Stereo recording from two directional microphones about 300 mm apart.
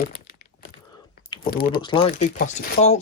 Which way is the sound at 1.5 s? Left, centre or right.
Left.